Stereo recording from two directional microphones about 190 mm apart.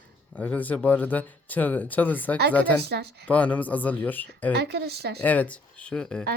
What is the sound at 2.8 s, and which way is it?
Speech, 60° right (ahead or behind).